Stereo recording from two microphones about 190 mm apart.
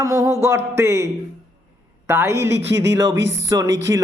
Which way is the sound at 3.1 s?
70° right (ahead or behind).